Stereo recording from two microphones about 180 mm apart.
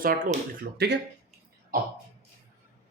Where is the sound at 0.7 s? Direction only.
65° right (ahead or behind).